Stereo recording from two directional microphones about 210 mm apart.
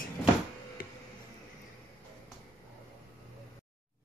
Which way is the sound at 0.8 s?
40° left (ahead or behind).